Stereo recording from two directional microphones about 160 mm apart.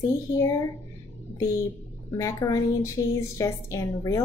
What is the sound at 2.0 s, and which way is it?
A woman's voice, 20° left (ahead or behind).